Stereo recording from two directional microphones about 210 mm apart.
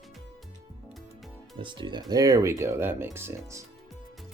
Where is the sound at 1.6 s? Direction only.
20° right (ahead or behind).